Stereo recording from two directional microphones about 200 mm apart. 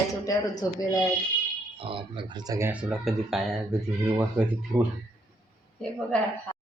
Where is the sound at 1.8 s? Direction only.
25° right (ahead or behind); by 4.8 s 10° right (ahead or behind).